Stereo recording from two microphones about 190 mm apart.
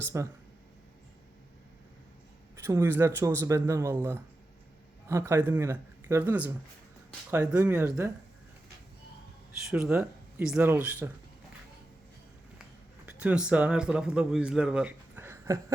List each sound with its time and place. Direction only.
0.0 s speech: 15° right (ahead or behind)
2.6 s speech: 15° right (ahead or behind)
9.6 s speech: 5° right (ahead or behind)
13.1 s speech: 5° right (ahead or behind)